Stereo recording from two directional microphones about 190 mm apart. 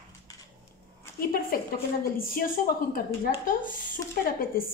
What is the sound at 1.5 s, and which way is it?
A woman's voice, 50° left (ahead or behind).